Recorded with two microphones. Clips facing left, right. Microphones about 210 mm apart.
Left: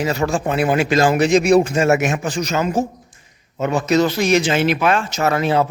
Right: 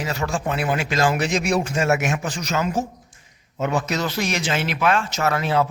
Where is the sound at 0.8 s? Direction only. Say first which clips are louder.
Left 6 dB; centre (ahead or behind).